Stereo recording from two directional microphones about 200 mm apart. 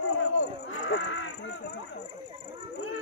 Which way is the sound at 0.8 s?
75° left (ahead or behind).